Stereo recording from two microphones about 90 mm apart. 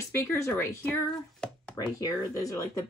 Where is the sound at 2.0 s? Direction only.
40° left (ahead or behind).